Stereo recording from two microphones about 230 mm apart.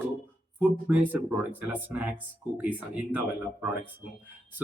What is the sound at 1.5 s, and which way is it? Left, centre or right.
A man's voice, centre.